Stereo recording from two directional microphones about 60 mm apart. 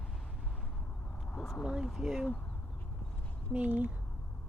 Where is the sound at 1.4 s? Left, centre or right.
Centre.